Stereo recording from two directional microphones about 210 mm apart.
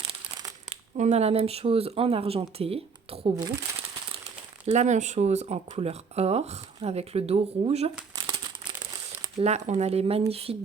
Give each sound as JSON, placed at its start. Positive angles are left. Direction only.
{"t": 0.9, "sound": "speech", "side_deg": -30}
{"t": 4.6, "sound": "speech", "side_deg": -35}
{"t": 9.4, "sound": "speech", "side_deg": -30}